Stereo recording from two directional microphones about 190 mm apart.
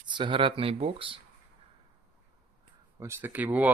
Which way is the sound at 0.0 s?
25° right (ahead or behind).